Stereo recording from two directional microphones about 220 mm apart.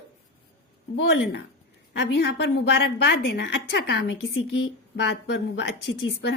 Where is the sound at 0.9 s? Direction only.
55° left (ahead or behind).